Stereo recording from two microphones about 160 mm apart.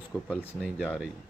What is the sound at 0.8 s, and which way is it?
Speech, 5° right (ahead or behind).